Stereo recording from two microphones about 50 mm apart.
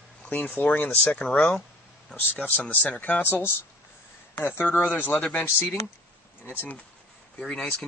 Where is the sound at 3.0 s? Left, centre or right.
Left.